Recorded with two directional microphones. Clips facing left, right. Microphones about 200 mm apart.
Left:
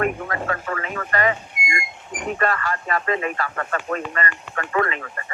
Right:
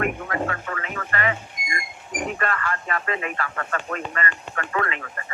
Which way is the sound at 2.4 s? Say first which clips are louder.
Left 3 dB; 35° left (ahead or behind).